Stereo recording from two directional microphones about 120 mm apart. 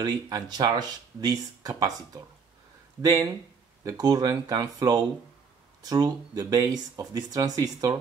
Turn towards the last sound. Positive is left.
turn(degrees=-30)  # may be behind; listen again after turning